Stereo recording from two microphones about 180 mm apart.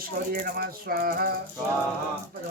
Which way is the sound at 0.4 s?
55° right (ahead or behind).